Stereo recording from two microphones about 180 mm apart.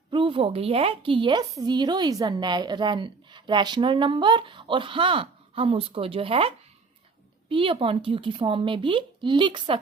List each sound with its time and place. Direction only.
0.1 s a woman's voice: 30° right (ahead or behind)